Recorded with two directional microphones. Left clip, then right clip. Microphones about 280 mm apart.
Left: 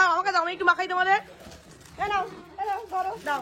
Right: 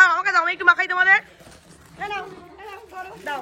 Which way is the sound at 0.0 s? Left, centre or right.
Centre.